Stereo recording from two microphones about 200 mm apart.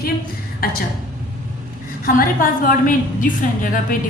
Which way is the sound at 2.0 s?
45° left (ahead or behind).